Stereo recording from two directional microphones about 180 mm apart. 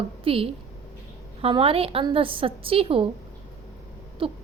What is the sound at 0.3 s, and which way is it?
A child's voice, 30° right (ahead or behind).